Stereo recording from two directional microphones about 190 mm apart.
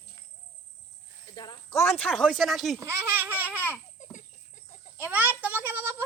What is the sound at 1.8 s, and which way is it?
Speech, 5° left (ahead or behind).